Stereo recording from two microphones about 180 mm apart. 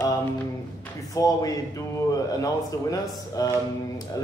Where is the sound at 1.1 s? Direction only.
20° left (ahead or behind).